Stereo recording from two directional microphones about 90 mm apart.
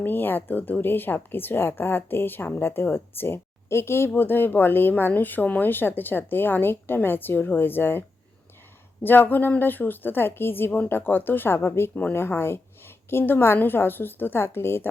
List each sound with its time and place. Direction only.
0.0 s speech: 20° left (ahead or behind)
9.0 s speech: 20° left (ahead or behind)